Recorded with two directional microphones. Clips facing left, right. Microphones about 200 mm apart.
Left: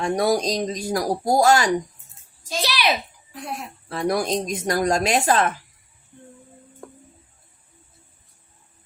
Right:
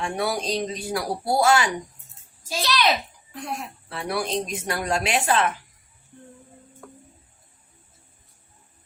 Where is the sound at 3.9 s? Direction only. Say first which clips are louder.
Left 5 dB; 40° left (ahead or behind).